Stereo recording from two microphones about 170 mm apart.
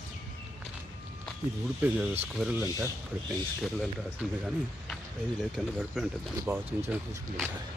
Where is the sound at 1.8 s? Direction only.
10° right (ahead or behind).